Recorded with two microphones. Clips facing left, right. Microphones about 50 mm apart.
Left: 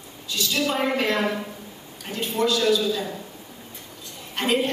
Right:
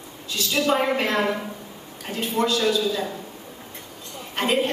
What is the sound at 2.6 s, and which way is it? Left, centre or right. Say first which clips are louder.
Speech: left 1 dB; centre.